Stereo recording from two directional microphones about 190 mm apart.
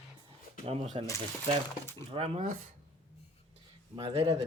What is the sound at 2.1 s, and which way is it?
Speech, 30° right (ahead or behind).